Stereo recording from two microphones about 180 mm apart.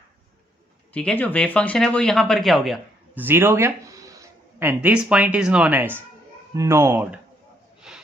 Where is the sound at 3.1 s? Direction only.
10° right (ahead or behind).